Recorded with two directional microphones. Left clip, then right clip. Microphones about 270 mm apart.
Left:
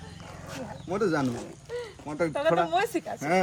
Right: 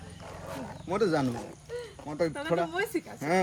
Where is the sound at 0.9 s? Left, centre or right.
Centre.